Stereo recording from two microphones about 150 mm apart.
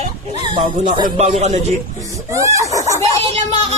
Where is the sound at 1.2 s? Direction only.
50° right (ahead or behind).